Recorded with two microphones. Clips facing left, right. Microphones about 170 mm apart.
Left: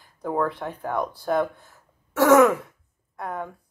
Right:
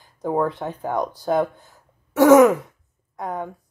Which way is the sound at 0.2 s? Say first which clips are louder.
Right 3 dB; 20° right (ahead or behind).